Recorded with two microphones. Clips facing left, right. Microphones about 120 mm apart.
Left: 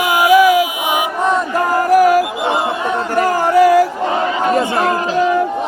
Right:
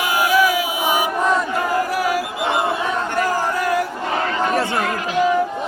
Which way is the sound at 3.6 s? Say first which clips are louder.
Left 14 dB; 90° left.